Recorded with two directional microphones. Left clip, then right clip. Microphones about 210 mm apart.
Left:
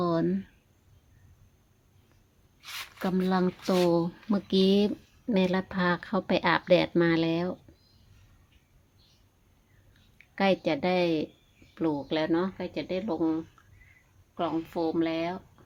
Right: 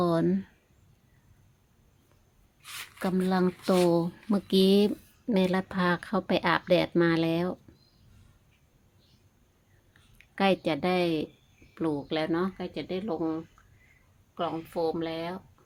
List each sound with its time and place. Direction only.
0.0 s a sound: 15° right (ahead or behind)
3.0 s speech: 10° right (ahead or behind)
10.2 s a woman's voice: 10° right (ahead or behind)